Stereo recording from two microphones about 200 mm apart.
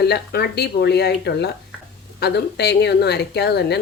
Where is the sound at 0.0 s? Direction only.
55° left (ahead or behind).